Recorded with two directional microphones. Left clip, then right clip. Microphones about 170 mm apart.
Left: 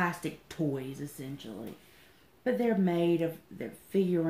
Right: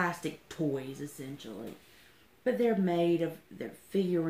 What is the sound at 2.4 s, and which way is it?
Speech, 30° left (ahead or behind).